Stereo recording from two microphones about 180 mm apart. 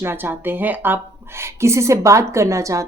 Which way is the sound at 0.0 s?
10° right (ahead or behind).